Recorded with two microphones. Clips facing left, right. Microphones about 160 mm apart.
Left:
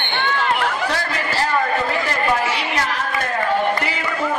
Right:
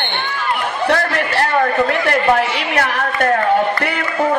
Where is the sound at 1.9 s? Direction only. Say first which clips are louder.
Right 5 dB; 65° right (ahead or behind).